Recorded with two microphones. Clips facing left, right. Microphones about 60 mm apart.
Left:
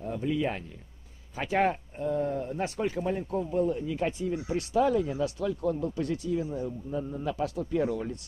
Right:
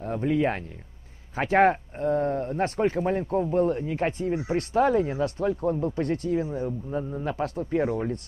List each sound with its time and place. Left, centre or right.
0.0 s speech: right